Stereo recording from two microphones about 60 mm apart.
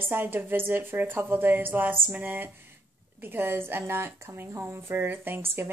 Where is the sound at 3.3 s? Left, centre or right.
Right.